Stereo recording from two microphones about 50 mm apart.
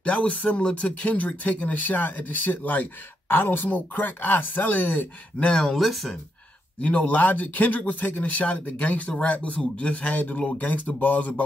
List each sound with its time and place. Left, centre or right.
0.0 s speech: left
5.6 s speech: centre
6.8 s a man's voice: left